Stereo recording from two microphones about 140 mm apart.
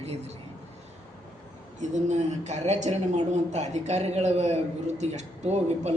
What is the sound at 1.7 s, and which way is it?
A woman's voice, 55° right (ahead or behind).